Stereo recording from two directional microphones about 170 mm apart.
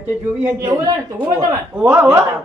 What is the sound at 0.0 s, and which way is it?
A man's voice, 10° right (ahead or behind).